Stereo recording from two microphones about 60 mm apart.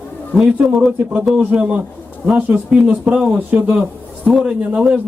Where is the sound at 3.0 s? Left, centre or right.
Centre.